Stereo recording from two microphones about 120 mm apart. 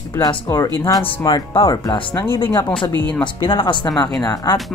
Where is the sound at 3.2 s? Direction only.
45° left (ahead or behind).